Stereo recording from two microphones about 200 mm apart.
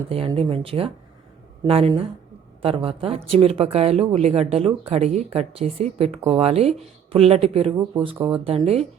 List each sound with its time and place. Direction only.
0.1 s speech: 30° right (ahead or behind)